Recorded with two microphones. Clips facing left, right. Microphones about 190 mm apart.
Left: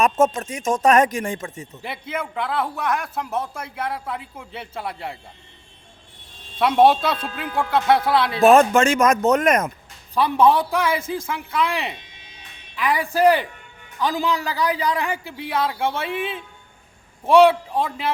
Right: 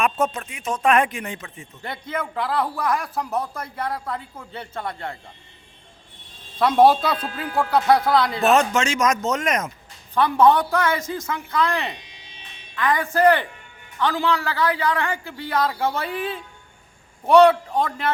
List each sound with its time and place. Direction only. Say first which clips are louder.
0.0 s speech: left 4 dB; 45° left (ahead or behind)
1.8 s a man's voice: right 1 dB; 5° left (ahead or behind)
6.6 s a man's voice: even; centre (ahead or behind)
8.4 s speech: left 8 dB; 50° left (ahead or behind)
10.6 s a man's voice: even; 10° left (ahead or behind)